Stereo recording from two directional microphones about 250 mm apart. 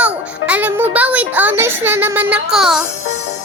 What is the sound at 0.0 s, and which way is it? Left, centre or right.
A child's voice, centre.